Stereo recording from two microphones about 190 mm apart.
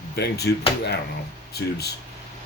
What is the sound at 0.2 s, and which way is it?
Speech, 60° left (ahead or behind).